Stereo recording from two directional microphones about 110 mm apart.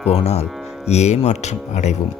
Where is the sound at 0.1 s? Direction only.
70° left (ahead or behind).